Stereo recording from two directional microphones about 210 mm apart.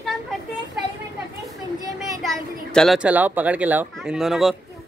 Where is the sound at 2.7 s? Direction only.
Centre (ahead or behind).